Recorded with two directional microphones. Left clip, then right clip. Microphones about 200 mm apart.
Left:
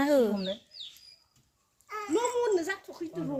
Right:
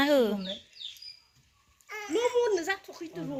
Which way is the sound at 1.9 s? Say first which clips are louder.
Right 1 dB; 70° left (ahead or behind).